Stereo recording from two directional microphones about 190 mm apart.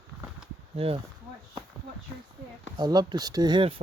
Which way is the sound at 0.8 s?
30° right (ahead or behind).